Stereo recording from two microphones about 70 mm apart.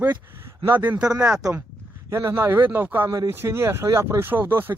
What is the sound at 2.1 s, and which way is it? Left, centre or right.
Speech, right.